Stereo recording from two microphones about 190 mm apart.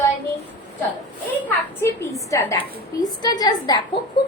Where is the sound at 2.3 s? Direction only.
15° left (ahead or behind).